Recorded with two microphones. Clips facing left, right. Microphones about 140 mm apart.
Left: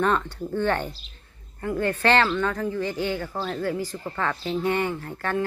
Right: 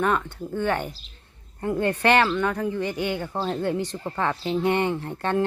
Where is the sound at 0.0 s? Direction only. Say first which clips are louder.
Left 1 dB; 10° right (ahead or behind).